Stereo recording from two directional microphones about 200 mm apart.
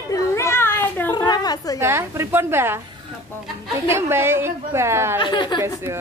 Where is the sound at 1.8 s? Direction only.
10° right (ahead or behind).